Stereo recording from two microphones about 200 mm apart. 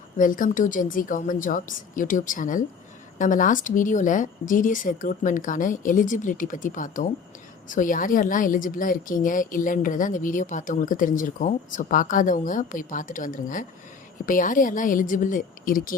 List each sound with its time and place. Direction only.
0.2 s a woman's voice: 40° left (ahead or behind)